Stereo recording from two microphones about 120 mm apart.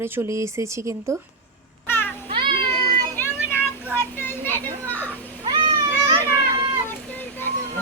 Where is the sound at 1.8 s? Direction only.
20° left (ahead or behind).